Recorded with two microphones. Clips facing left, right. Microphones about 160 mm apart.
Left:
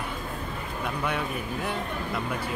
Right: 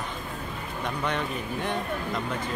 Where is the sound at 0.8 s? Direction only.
10° left (ahead or behind).